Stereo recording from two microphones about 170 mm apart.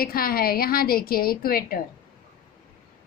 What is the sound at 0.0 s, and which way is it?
A woman's voice, 60° left (ahead or behind).